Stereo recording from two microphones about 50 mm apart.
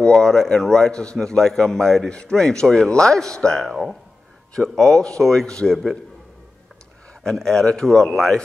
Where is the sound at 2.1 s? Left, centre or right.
Left.